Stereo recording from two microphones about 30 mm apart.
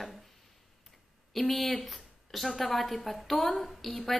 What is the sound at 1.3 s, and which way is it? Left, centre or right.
A woman's voice, centre.